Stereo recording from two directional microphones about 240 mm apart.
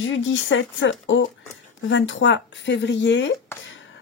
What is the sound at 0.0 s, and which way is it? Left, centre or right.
Speech, left.